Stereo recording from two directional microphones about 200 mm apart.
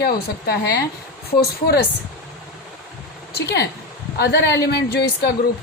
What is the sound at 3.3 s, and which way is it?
A woman's voice, 55° left (ahead or behind).